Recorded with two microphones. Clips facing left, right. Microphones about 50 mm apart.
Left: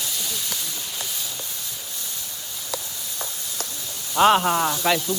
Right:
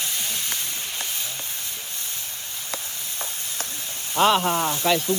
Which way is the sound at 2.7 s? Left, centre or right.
Right.